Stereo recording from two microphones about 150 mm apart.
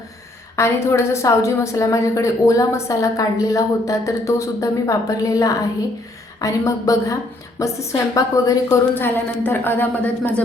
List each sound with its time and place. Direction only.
0.5 s a woman's voice: 20° left (ahead or behind)